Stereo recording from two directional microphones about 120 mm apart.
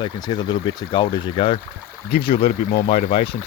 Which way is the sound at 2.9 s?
65° left (ahead or behind).